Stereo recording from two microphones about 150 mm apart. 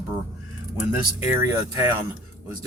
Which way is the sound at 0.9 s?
15° right (ahead or behind).